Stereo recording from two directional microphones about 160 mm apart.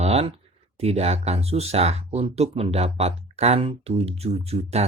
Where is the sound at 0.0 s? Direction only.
40° right (ahead or behind).